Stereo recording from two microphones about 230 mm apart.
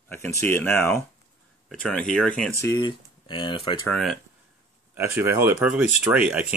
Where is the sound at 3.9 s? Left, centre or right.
Centre.